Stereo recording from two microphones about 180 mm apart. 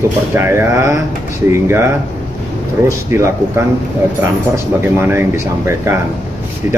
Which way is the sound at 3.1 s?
15° right (ahead or behind).